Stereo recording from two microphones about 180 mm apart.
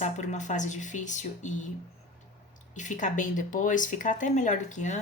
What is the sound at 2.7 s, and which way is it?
A woman's voice, 45° left (ahead or behind).